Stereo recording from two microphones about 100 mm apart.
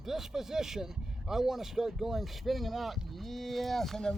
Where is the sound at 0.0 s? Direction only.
5° right (ahead or behind).